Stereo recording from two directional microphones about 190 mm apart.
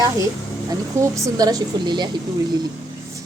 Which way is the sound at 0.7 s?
15° right (ahead or behind).